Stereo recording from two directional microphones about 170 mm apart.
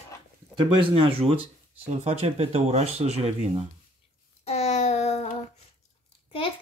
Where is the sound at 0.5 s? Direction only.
30° right (ahead or behind).